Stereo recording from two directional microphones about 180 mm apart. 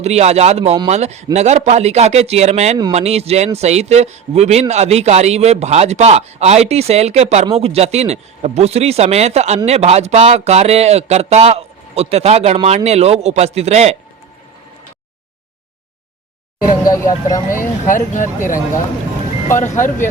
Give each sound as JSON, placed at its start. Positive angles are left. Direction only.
{"t": 0.0, "sound": "speech", "side_deg": -35}
{"t": 16.8, "sound": "speech", "side_deg": 20}
{"t": 17.6, "sound": "speech", "side_deg": 45}